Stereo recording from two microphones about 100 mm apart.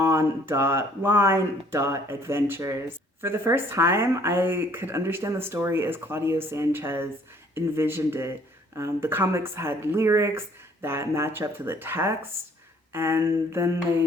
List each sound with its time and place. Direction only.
0.0 s speech: 25° right (ahead or behind)